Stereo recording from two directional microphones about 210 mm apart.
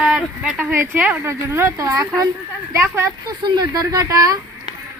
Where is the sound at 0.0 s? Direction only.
5° right (ahead or behind).